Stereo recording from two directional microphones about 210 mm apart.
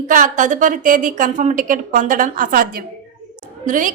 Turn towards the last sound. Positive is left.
turn(degrees=-40)  # may be behind; listen again after turning